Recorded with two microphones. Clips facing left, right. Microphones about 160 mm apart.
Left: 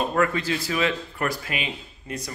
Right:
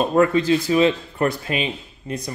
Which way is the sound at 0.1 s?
25° right (ahead or behind).